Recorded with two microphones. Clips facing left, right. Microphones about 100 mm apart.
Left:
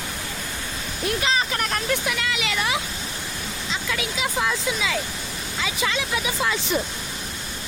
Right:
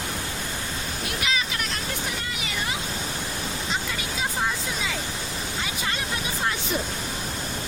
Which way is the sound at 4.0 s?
90° left.